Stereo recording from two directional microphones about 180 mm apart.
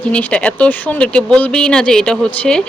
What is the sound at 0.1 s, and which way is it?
Speech, 5° left (ahead or behind).